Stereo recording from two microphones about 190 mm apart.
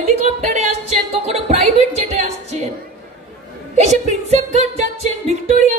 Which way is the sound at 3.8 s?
35° right (ahead or behind).